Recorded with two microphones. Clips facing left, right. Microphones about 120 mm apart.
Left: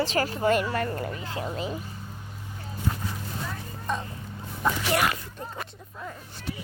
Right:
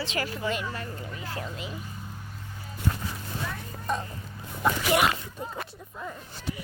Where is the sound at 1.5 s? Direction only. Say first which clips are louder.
Left 6 dB; 40° left (ahead or behind).